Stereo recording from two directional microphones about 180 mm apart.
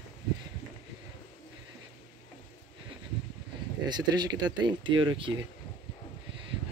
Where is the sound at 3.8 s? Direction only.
25° right (ahead or behind).